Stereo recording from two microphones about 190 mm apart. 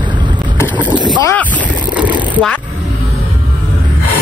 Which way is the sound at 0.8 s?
25° right (ahead or behind).